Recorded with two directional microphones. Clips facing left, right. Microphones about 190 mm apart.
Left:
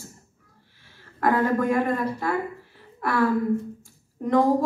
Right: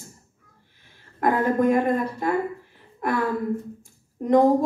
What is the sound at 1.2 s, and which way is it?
A woman's voice, 20° right (ahead or behind).